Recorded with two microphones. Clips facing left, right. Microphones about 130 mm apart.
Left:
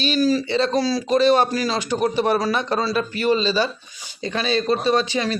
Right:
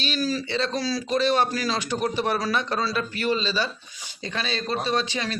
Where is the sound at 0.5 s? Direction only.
40° left (ahead or behind); by 2.9 s 25° left (ahead or behind).